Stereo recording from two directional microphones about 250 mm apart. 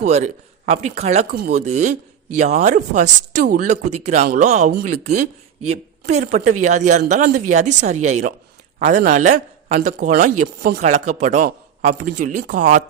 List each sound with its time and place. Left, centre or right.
0.0 s speech: right